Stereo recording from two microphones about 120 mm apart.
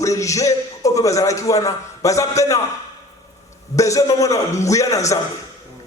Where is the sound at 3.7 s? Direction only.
25° left (ahead or behind).